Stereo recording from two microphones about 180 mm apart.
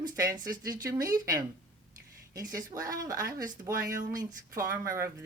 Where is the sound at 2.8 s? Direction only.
20° right (ahead or behind).